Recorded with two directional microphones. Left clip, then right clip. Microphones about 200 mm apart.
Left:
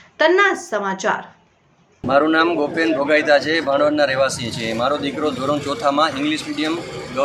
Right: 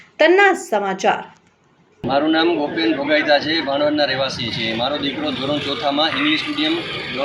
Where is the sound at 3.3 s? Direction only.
40° left (ahead or behind).